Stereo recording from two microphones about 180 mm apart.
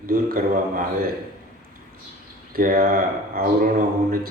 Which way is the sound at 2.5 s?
55° right (ahead or behind).